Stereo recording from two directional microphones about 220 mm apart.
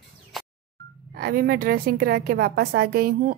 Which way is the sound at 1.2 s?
40° right (ahead or behind).